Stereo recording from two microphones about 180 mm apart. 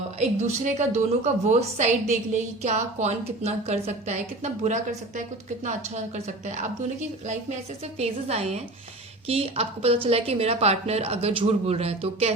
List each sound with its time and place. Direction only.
0.2 s a woman's voice: 35° right (ahead or behind)
7.9 s a woman's voice: 35° right (ahead or behind)